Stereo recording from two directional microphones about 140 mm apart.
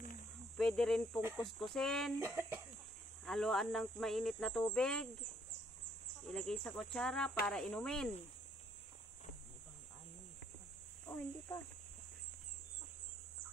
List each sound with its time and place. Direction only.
0.6 s speech: 5° left (ahead or behind)
2.1 s speech: 15° right (ahead or behind)
3.3 s speech: centre (ahead or behind)